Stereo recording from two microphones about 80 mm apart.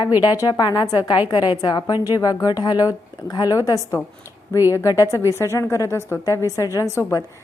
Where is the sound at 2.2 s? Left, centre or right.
Left.